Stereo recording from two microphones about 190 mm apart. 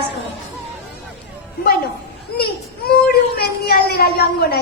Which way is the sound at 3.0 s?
55° left (ahead or behind).